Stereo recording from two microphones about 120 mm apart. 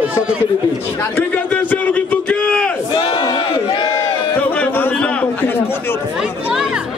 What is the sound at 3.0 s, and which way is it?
Crowd, 45° left (ahead or behind).